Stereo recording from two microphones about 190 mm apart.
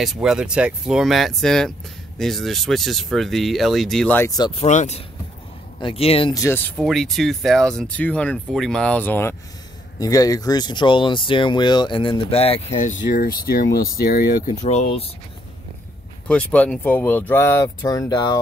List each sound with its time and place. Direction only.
0.0 s speech: centre (ahead or behind)
4.4 s speech: 30° left (ahead or behind)
6.3 s speech: 15° left (ahead or behind); by 15.0 s 35° left (ahead or behind)
16.3 s speech: 5° left (ahead or behind)